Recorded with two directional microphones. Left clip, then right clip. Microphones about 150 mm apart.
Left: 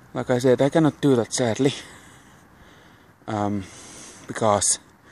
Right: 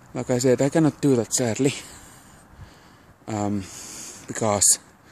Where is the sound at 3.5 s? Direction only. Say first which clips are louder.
Even; 15° right (ahead or behind).